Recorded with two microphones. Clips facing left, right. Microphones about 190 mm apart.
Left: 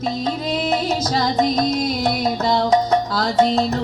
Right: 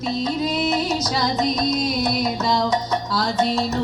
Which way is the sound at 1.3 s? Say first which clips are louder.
Left 3 dB; 55° left (ahead or behind).